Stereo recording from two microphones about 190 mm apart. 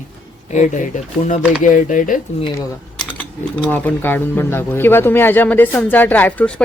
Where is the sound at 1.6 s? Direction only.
45° left (ahead or behind).